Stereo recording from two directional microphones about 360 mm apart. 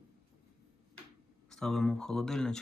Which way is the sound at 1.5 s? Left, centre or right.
Centre.